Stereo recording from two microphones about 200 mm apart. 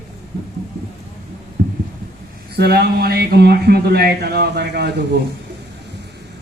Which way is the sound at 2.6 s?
55° right (ahead or behind).